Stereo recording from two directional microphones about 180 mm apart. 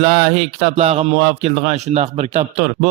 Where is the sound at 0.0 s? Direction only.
35° right (ahead or behind).